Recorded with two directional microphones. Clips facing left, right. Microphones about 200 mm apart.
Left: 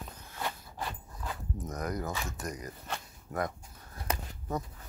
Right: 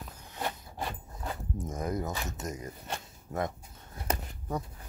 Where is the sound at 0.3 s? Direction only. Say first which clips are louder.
Right 2 dB; 20° right (ahead or behind).